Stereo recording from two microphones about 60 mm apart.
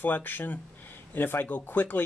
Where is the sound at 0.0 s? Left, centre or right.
Left.